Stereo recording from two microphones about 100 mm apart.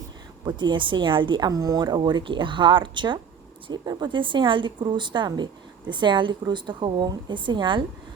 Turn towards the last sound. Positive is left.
turn(degrees=-55)  # may be behind; listen again after turning